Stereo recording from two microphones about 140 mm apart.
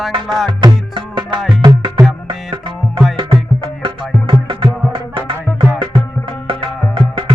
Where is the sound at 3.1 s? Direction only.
40° right (ahead or behind).